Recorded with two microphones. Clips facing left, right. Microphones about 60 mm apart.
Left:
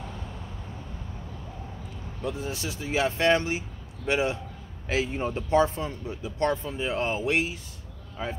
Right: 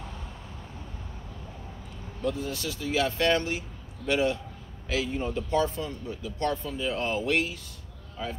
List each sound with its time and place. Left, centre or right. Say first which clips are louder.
2.2 s speech: right 1 dB; centre